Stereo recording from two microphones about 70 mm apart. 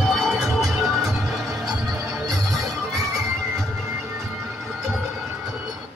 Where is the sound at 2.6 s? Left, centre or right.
Right.